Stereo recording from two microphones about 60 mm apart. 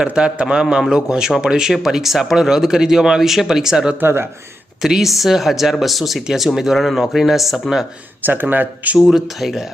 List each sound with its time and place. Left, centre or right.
0.1 s speech: centre
4.0 s speech: right
4.8 s speech: centre
8.2 s speech: right
9.0 s speech: centre